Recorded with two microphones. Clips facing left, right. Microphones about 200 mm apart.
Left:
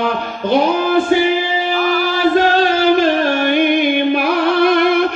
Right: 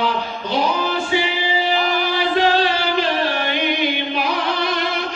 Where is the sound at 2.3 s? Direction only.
45° left (ahead or behind).